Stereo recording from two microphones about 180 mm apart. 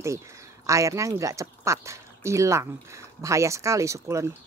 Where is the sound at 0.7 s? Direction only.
15° right (ahead or behind).